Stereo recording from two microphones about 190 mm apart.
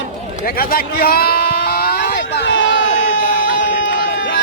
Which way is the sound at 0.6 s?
50° left (ahead or behind).